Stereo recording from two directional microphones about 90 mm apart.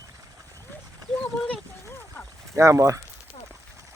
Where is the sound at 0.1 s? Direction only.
35° right (ahead or behind).